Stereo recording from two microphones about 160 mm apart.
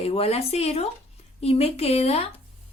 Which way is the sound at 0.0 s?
40° left (ahead or behind).